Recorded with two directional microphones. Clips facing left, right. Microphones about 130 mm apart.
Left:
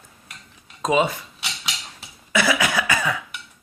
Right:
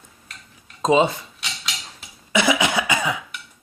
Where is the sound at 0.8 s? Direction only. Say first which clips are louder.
Right 3 dB; 25° right (ahead or behind).